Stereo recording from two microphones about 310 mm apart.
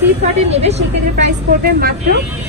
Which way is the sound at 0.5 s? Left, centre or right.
Right.